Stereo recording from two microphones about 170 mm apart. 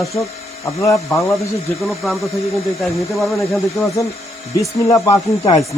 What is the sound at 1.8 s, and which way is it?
Speech, centre (ahead or behind).